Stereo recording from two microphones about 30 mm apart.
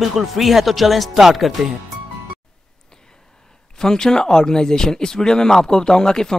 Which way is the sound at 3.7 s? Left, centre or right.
Left.